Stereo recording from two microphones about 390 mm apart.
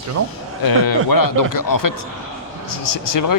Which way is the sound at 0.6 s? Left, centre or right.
Left.